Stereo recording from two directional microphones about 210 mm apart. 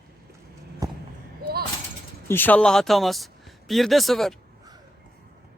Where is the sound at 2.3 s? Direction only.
10° left (ahead or behind).